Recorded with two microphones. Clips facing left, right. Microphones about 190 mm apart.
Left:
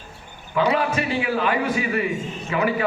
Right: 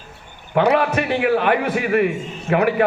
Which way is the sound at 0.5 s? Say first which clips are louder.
Right 4 dB; 65° right (ahead or behind).